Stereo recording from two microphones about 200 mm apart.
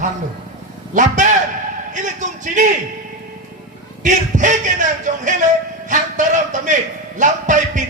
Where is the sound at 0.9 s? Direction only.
40° right (ahead or behind).